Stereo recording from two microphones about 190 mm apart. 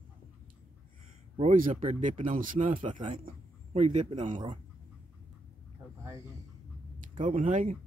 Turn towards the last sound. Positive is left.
turn(degrees=-35)  # may be behind; listen again after turning